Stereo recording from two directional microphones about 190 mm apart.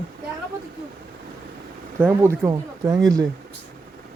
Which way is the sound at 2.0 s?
15° right (ahead or behind).